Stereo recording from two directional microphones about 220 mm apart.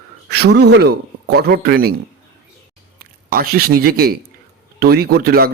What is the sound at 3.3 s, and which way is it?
Speech, 40° right (ahead or behind).